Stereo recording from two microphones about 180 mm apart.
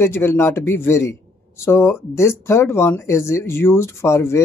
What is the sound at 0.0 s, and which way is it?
Speech, 15° left (ahead or behind).